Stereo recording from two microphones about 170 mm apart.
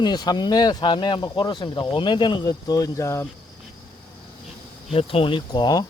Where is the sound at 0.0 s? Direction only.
25° left (ahead or behind).